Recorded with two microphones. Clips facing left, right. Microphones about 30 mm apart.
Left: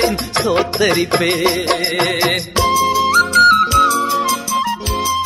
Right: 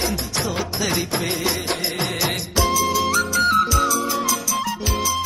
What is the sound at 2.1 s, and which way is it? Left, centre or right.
Music, left.